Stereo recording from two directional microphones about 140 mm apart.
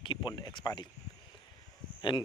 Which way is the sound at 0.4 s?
35° left (ahead or behind).